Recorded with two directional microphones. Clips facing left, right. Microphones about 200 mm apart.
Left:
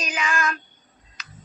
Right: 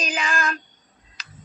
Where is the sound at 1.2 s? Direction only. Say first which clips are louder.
Left 1 dB; 35° right (ahead or behind).